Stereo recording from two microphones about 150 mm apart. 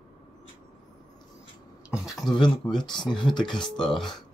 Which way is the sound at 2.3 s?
30° left (ahead or behind).